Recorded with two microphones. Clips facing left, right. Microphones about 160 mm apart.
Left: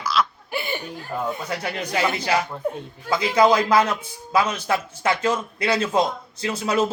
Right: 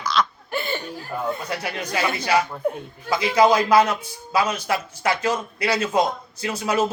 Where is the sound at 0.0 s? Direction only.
5° left (ahead or behind).